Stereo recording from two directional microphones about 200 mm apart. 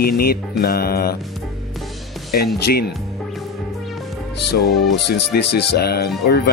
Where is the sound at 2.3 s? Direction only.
50° left (ahead or behind).